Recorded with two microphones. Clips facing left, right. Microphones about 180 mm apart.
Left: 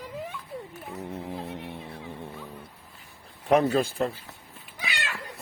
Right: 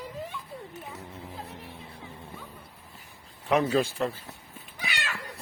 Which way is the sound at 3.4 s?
45° left (ahead or behind).